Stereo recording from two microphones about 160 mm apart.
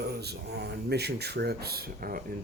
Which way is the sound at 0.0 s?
90° right.